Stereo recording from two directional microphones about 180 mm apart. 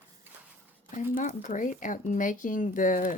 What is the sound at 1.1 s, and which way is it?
Speech, 45° left (ahead or behind).